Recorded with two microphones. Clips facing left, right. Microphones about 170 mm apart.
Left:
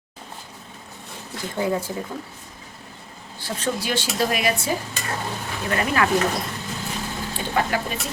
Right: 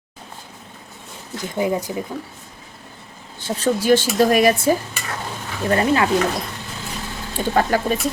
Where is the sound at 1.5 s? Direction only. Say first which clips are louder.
Right 3 dB; 15° right (ahead or behind).